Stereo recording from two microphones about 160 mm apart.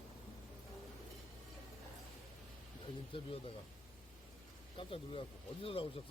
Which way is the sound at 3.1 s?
35° left (ahead or behind).